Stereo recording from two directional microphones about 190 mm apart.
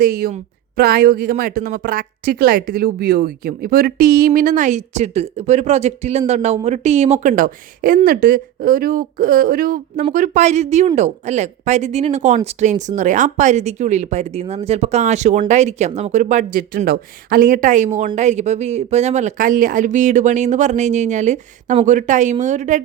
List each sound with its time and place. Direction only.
0.0 s a woman's voice: 50° right (ahead or behind)